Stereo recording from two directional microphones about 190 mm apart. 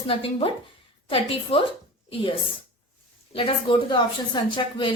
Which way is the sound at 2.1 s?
25° left (ahead or behind).